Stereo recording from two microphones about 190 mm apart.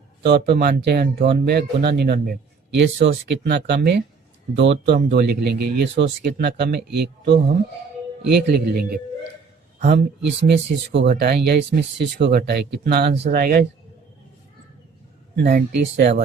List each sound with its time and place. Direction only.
0.2 s speech: 60° right (ahead or behind)
15.4 s speech: 55° right (ahead or behind)